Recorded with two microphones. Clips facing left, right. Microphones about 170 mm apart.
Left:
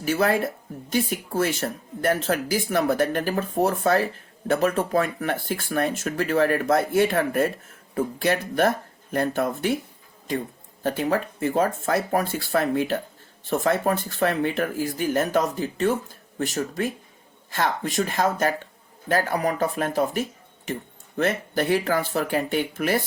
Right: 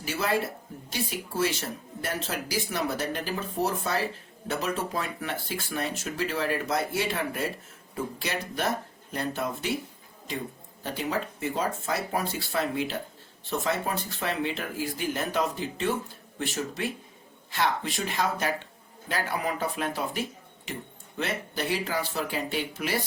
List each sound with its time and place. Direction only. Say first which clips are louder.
0.0 s speech: left 6 dB; 50° left (ahead or behind)
10.8 s speech: left 7 dB; 55° left (ahead or behind)